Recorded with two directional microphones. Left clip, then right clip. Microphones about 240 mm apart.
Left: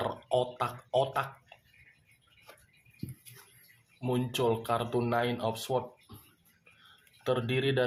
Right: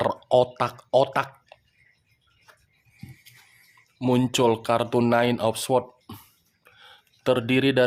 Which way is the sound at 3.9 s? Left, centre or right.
Right.